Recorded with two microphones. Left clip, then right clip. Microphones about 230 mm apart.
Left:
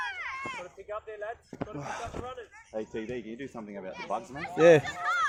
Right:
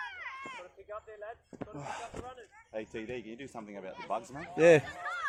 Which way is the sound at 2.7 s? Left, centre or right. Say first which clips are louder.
Left 4 dB; centre.